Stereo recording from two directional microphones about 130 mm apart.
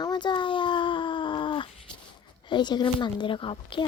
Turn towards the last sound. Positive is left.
turn(degrees=40)  # may be behind; listen again after turning